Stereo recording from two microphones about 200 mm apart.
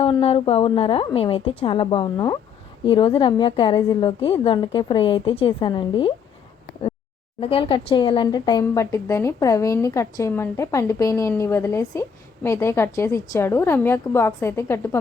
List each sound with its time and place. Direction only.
0.0 s a woman's voice: 30° left (ahead or behind)
7.3 s speech: 25° left (ahead or behind)